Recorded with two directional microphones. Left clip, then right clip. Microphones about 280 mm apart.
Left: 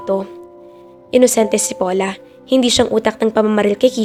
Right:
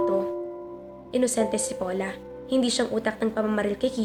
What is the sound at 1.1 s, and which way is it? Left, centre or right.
Speech, left.